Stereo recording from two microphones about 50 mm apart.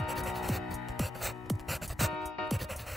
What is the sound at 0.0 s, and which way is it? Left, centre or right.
Music, centre.